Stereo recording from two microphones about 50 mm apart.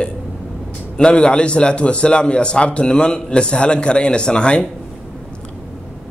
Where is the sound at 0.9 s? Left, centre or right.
Centre.